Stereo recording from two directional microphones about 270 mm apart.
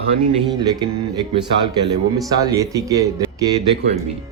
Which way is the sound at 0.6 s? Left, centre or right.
Centre.